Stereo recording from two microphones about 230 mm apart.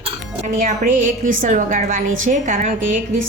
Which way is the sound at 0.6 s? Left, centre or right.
Right.